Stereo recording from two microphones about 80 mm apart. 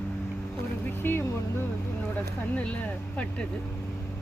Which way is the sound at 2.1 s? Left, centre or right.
Centre.